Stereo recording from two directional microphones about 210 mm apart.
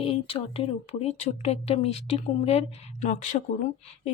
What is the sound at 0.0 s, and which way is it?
Speech, 25° left (ahead or behind).